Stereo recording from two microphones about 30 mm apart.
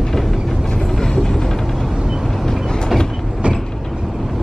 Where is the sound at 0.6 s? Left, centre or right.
Left.